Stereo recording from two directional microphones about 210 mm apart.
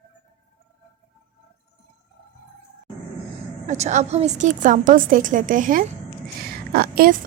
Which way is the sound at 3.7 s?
35° right (ahead or behind).